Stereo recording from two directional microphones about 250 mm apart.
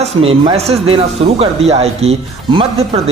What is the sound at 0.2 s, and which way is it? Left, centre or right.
Speech, right.